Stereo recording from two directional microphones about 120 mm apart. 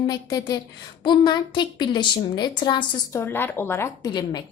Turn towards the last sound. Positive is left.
turn(degrees=35)  # may be behind; listen again after turning